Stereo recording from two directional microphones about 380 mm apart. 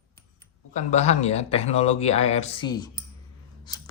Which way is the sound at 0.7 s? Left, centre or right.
Centre.